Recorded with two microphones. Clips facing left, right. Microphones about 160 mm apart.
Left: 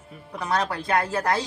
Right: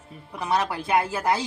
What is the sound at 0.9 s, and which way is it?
Speech, 20° right (ahead or behind).